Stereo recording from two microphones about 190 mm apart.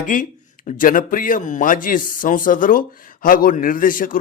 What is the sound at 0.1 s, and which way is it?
A man's voice, 45° left (ahead or behind).